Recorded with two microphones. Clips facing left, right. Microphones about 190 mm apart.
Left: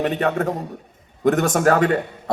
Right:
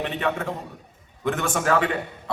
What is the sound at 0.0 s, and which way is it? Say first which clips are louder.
A man's voice: left 6 dB; 45° left (ahead or behind).